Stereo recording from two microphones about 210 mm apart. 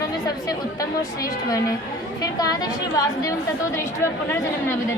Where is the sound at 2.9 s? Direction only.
15° left (ahead or behind).